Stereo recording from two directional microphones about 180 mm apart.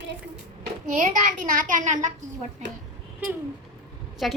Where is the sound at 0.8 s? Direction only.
45° right (ahead or behind).